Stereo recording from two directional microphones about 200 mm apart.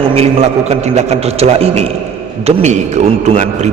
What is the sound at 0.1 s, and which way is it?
A man's voice, 30° right (ahead or behind).